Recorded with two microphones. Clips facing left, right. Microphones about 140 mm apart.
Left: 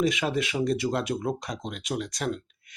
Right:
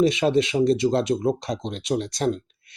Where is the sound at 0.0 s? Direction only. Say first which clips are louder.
Right 7 dB; 25° right (ahead or behind).